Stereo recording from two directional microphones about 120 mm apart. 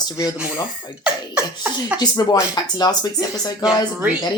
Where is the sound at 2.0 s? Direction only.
35° left (ahead or behind).